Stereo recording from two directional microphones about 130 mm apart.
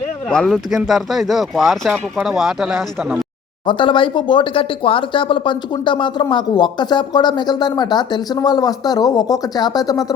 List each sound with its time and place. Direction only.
0.3 s speech: 5° left (ahead or behind)
3.7 s speech: 40° left (ahead or behind)